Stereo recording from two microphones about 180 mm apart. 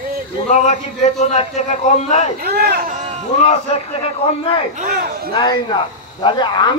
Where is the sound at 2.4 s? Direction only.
60° right (ahead or behind).